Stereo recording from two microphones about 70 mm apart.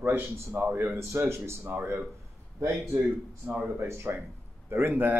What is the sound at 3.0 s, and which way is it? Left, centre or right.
Speech, right.